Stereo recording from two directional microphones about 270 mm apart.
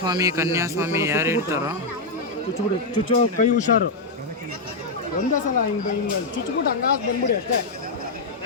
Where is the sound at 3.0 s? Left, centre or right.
Left.